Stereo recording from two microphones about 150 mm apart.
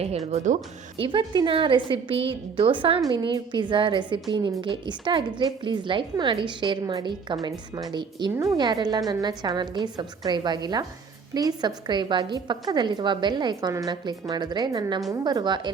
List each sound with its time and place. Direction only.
0.3 s speech: 50° right (ahead or behind)
0.9 s a woman's voice: 35° right (ahead or behind)